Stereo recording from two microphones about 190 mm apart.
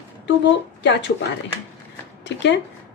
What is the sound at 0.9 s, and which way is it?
Speech, 65° left (ahead or behind).